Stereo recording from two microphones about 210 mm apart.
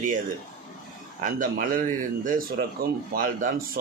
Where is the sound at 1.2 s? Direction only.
40° right (ahead or behind).